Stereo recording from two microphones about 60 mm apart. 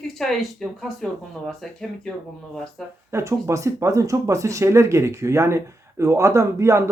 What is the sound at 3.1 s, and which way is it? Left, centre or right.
Speech, right.